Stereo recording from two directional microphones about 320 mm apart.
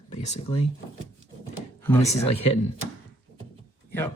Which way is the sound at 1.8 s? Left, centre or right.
Centre.